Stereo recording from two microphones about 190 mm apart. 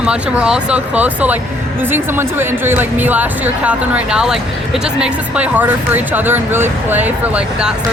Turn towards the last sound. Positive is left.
turn(degrees=-5)  # may be behind; listen again after turning